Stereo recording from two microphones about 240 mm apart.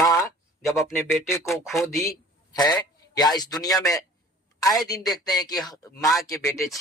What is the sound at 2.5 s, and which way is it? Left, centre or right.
A man's voice, centre.